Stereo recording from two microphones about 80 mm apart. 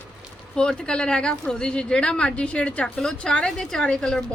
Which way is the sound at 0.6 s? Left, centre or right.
Centre.